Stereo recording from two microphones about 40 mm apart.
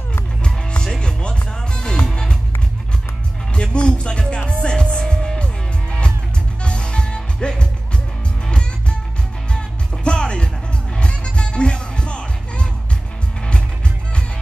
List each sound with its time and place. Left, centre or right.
0.9 s music: centre
3.7 s music: left
10.0 s music: left